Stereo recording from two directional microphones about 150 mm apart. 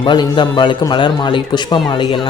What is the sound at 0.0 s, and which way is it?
A man's voice, 30° left (ahead or behind).